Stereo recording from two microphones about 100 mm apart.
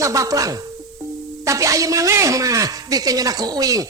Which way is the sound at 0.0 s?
30° right (ahead or behind).